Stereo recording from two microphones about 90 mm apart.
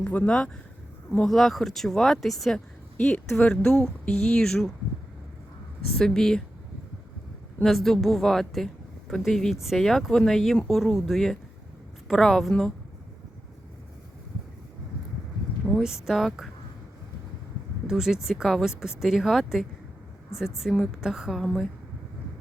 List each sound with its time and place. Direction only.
0.0 s a woman's voice: 15° left (ahead or behind)
6.0 s a woman's voice: 5° left (ahead or behind)
7.6 s a woman's voice: 5° left (ahead or behind)
15.8 s a woman's voice: 5° right (ahead or behind)
17.8 s a woman's voice: 5° right (ahead or behind)